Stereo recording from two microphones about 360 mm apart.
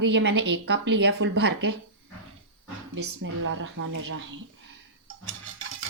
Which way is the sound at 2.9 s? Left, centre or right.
Right.